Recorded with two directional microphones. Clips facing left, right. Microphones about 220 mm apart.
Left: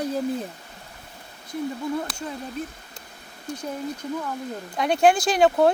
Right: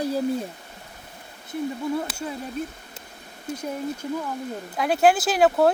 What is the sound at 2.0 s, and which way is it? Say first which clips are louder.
Speech: right 1 dB; 5° right (ahead or behind).